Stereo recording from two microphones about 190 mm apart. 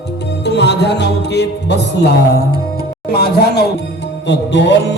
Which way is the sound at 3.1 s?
55° left (ahead or behind).